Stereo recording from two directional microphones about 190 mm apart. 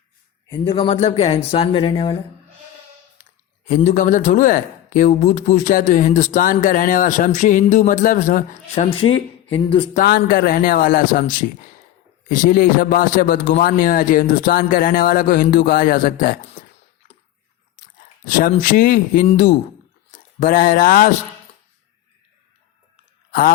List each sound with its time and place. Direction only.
0.5 s speech: 25° left (ahead or behind)
3.8 s a man's voice: 45° left (ahead or behind); by 9.9 s 25° left (ahead or behind)
9.9 s a man's voice: 50° left (ahead or behind)
18.3 s a man's voice: 45° left (ahead or behind)